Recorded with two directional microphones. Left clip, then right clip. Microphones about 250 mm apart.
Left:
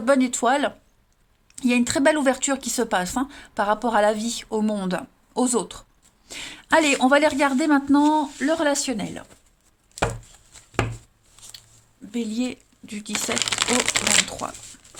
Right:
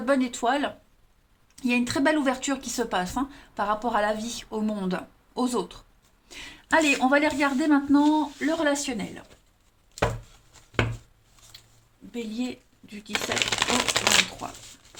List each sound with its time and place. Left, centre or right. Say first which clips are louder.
0.0 s speech: left 5 dB; left
12.1 s speech: left 5 dB; left
13.4 s speech: left 2 dB; left